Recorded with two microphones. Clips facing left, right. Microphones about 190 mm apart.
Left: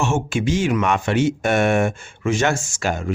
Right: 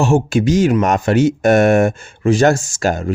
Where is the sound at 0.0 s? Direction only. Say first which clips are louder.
Right 7 dB; 35° right (ahead or behind).